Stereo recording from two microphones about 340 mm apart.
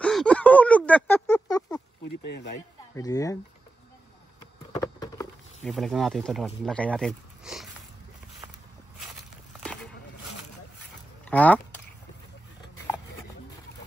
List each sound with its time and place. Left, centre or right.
0.0 s a sound: centre
2.0 s insect: left
2.9 s speech: centre
4.7 s speech: centre
9.6 s walk: centre
11.2 s speech: centre